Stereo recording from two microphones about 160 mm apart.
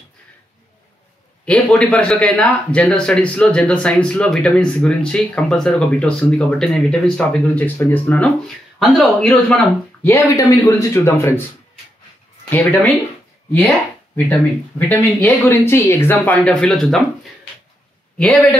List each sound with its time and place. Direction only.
1.4 s speech: 5° left (ahead or behind)
10.0 s speech: 20° left (ahead or behind)
12.4 s speech: 10° left (ahead or behind)
14.1 s speech: 10° left (ahead or behind)
18.1 s a man's voice: 10° left (ahead or behind)